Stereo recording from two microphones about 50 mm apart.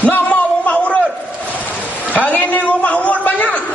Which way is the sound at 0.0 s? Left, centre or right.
Left.